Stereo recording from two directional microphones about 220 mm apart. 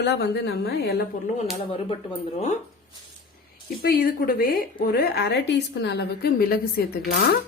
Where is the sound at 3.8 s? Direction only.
45° left (ahead or behind).